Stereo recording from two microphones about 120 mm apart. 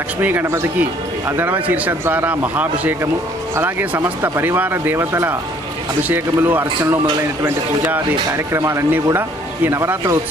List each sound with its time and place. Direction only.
0.2 s speech: 15° right (ahead or behind)